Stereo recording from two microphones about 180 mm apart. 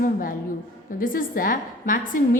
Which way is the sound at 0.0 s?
50° left (ahead or behind).